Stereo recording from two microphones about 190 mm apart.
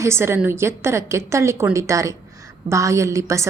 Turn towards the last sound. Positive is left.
turn(degrees=-15)  # may be behind; listen again after turning